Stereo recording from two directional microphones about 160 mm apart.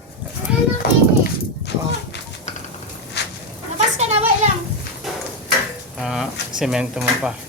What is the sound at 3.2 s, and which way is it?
Goat, 90° left.